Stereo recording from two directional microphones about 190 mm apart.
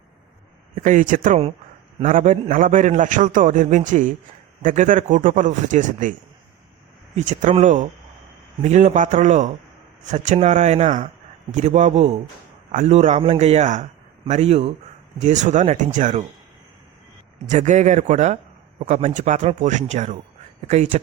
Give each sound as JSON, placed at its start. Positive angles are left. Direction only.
{"t": 0.8, "sound": "a man's voice", "side_deg": -45}
{"t": 7.2, "sound": "a man's voice", "side_deg": -40}
{"t": 17.5, "sound": "a man's voice", "side_deg": -40}